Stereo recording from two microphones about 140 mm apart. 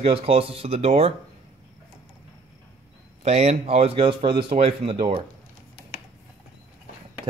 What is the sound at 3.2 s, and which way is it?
A man's voice, 50° right (ahead or behind).